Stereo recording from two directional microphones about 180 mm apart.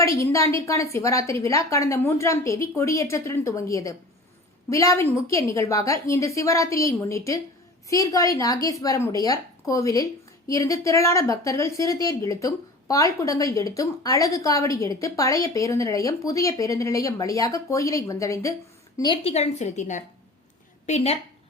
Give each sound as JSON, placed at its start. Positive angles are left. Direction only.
{"t": 0.0, "sound": "a woman's voice", "side_deg": 15}